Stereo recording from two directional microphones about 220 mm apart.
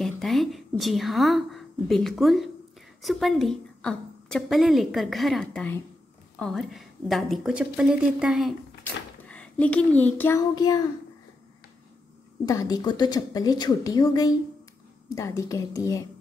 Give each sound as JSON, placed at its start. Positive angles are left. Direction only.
{"t": 0.0, "sound": "a woman's voice", "side_deg": 0}
{"t": 12.4, "sound": "a woman's voice", "side_deg": 15}